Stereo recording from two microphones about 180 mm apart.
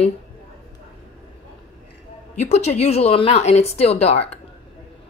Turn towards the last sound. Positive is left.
turn(degrees=35)  # may be behind; listen again after turning